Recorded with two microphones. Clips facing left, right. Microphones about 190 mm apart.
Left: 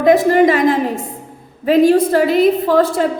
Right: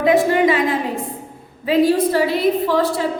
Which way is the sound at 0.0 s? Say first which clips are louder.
Left 4 dB; 45° left (ahead or behind).